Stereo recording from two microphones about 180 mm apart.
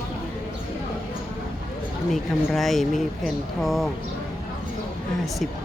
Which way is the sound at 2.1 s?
Centre (ahead or behind).